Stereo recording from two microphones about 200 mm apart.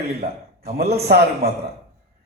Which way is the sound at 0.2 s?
50° right (ahead or behind).